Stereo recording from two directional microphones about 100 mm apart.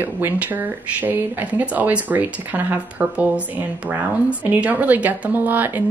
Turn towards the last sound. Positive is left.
turn(degrees=-20)  # may be behind; listen again after turning